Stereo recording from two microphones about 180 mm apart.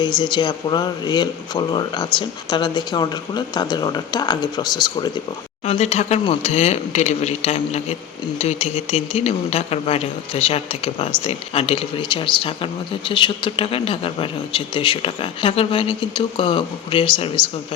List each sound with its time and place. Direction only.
0.0 s speech: 25° left (ahead or behind)
5.6 s speech: 35° left (ahead or behind)